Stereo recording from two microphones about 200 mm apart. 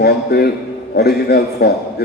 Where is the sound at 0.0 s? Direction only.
50° left (ahead or behind).